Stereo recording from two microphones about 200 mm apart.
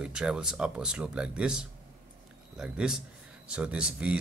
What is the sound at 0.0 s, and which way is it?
Speech, 5° right (ahead or behind).